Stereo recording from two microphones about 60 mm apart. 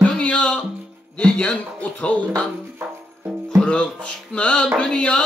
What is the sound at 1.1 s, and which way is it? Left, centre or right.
Speech, centre.